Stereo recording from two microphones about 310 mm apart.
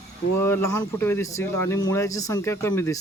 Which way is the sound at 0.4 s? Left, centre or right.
Centre.